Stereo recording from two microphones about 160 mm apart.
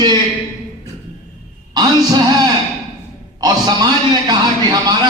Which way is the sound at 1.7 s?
25° right (ahead or behind).